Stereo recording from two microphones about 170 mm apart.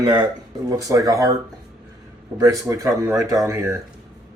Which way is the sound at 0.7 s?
20° right (ahead or behind).